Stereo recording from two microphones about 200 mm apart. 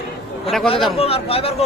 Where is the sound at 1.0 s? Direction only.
30° left (ahead or behind).